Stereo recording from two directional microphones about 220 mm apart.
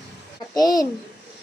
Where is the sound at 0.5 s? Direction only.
15° left (ahead or behind).